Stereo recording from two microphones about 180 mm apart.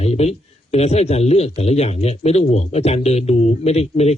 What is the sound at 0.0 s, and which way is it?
Speech, 35° left (ahead or behind).